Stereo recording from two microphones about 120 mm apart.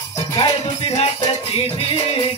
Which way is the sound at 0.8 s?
55° left (ahead or behind).